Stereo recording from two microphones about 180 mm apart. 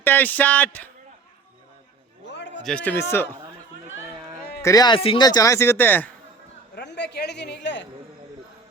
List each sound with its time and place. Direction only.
0.0 s speech: 10° left (ahead or behind)
2.2 s a sound: 80° left
2.6 s speech: 5° left (ahead or behind)
4.6 s speech: 20° left (ahead or behind)
6.7 s a man's voice: 70° left (ahead or behind)